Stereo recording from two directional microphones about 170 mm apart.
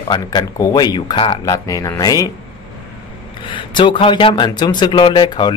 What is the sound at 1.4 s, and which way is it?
Speech, 20° left (ahead or behind).